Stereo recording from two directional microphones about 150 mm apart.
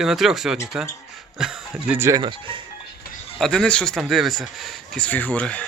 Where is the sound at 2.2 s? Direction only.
35° right (ahead or behind).